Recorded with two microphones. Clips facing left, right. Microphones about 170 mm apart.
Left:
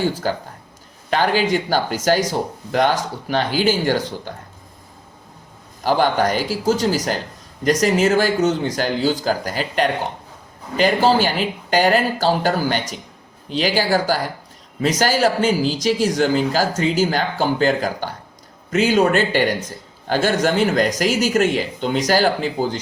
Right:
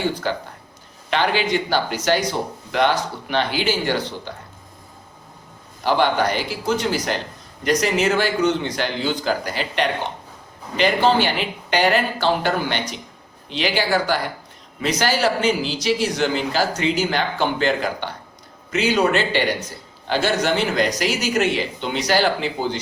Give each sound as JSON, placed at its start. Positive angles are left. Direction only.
{"t": 0.2, "sound": "speech", "side_deg": 40}
{"t": 5.8, "sound": "speech", "side_deg": 40}